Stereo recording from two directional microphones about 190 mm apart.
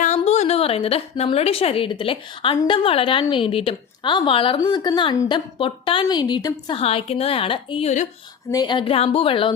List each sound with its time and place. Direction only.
0.0 s a woman's voice: 40° left (ahead or behind)
8.4 s a woman's voice: 20° left (ahead or behind)